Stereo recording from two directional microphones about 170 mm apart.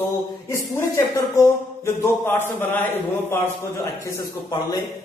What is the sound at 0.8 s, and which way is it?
A man's voice, 15° left (ahead or behind).